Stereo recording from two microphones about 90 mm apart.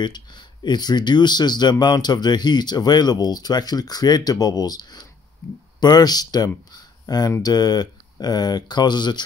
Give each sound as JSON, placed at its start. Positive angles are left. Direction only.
{"t": 0.0, "sound": "speech", "side_deg": 55}